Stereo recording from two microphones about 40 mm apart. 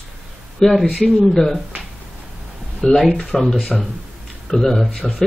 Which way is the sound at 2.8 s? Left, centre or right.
Centre.